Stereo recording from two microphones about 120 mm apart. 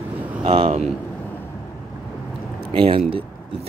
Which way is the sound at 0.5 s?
55° right (ahead or behind).